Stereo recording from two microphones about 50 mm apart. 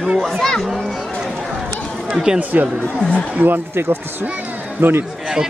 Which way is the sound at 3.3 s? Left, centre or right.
Right.